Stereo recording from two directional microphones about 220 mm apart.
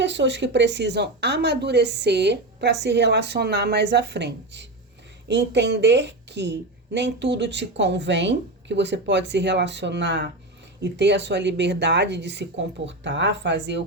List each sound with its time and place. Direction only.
0.0 s a woman's voice: 55° right (ahead or behind)